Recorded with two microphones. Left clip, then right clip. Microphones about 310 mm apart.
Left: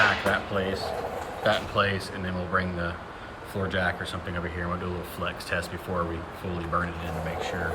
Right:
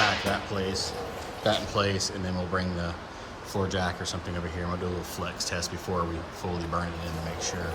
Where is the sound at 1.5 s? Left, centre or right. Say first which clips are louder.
Left 2 dB; centre.